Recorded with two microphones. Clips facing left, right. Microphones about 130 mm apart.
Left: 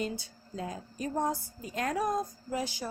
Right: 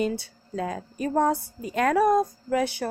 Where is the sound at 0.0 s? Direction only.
70° right (ahead or behind).